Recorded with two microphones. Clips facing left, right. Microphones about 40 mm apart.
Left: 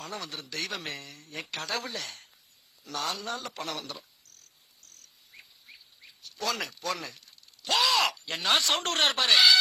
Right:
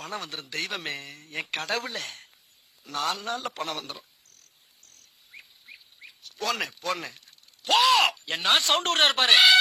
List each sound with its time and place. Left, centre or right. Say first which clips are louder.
0.0 s a man's voice: right 3 dB; right
2.8 s cricket: right 4 dB; right
5.4 s a sound: right 3 dB; right
6.0 s speech: right 2 dB; right